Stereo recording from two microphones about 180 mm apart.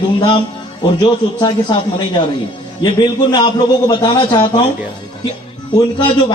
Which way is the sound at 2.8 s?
25° left (ahead or behind).